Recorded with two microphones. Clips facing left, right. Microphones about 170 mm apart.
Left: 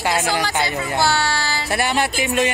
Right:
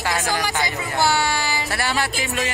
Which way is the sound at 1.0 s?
15° right (ahead or behind).